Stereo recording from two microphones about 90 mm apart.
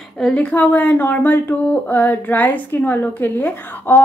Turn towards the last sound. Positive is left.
turn(degrees=25)  # may be behind; listen again after turning